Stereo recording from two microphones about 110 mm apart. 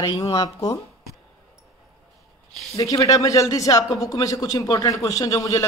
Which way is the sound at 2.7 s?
30° left (ahead or behind).